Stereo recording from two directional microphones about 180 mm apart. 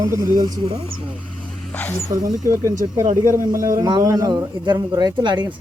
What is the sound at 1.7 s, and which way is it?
Speech, 5° left (ahead or behind).